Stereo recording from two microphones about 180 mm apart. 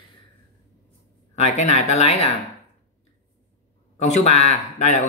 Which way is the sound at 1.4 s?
40° left (ahead or behind).